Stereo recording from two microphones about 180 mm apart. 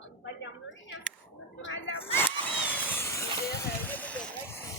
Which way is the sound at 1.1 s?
5° left (ahead or behind).